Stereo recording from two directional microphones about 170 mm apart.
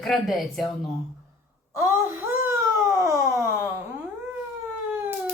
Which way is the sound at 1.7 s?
15° right (ahead or behind).